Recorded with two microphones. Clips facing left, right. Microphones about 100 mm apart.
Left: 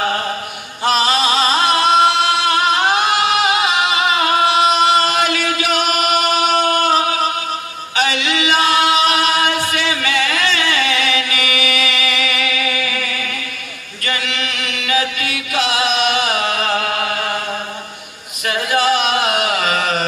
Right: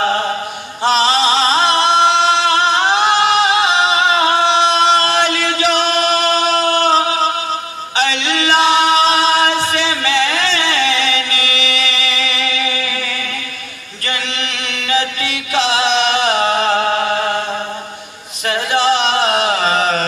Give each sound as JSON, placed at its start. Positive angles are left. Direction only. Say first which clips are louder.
{"t": 0.0, "sound": "chant", "louder": "right 3 dB", "side_deg": -30}
{"t": 0.8, "sound": "singing", "louder": "right 2 dB", "side_deg": -30}
{"t": 7.9, "sound": "chant", "louder": "right 1 dB", "side_deg": -30}
{"t": 18.5, "sound": "chant", "louder": "right 1 dB", "side_deg": -30}